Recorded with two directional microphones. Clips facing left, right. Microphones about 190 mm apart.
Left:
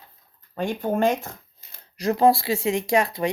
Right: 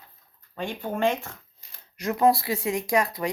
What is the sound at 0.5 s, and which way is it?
Speech, 45° left (ahead or behind).